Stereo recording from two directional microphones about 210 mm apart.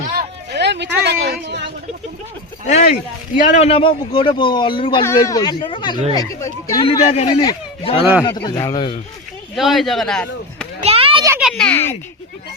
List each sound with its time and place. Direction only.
0.1 s a sound: 50° right (ahead or behind)
2.6 s a man's voice: 35° left (ahead or behind); by 6.8 s 15° left (ahead or behind)
7.1 s a man's voice: 30° left (ahead or behind)
9.6 s speech: centre (ahead or behind)
10.8 s children playing: 25° right (ahead or behind)
11.3 s speech: 5° right (ahead or behind)